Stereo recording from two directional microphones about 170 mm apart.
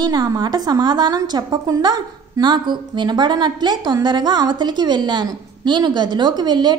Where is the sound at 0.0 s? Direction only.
25° right (ahead or behind).